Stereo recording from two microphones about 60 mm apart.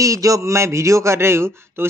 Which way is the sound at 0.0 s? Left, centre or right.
Right.